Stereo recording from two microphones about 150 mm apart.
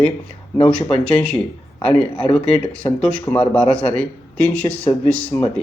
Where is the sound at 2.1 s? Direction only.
40° left (ahead or behind).